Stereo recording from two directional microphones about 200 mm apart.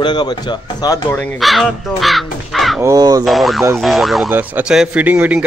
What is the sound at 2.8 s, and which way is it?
Speech, 15° right (ahead or behind).